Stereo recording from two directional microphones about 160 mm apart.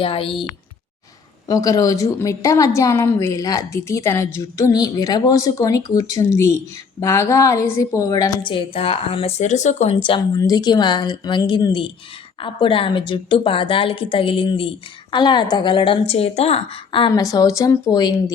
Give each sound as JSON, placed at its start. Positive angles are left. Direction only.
{"t": 0.0, "sound": "a woman's voice", "side_deg": 35}
{"t": 1.5, "sound": "a woman's voice", "side_deg": 20}
{"t": 17.1, "sound": "a woman's voice", "side_deg": 20}